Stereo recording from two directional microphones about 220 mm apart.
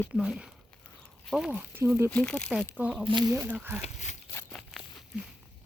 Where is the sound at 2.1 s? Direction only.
5° left (ahead or behind).